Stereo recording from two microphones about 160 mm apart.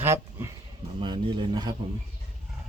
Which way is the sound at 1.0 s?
30° right (ahead or behind).